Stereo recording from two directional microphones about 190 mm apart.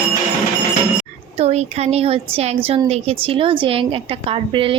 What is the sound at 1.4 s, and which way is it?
A woman's voice, 35° right (ahead or behind).